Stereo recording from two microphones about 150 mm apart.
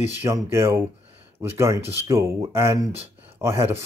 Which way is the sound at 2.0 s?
20° right (ahead or behind).